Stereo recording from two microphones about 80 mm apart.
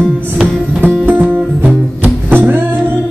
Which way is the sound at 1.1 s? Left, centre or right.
Right.